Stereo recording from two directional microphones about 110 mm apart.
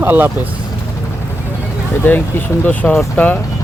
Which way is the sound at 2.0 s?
20° left (ahead or behind).